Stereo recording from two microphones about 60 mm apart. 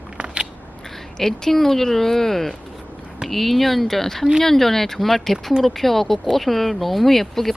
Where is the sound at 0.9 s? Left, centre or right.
Centre.